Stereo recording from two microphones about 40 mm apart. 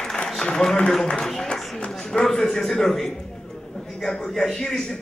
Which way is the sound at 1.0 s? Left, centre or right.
Centre.